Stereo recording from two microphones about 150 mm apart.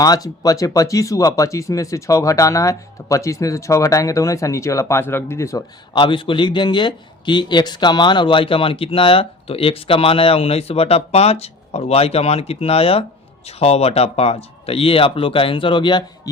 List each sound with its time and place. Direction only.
0.0 s speech: 25° left (ahead or behind)
5.9 s speech: 35° left (ahead or behind)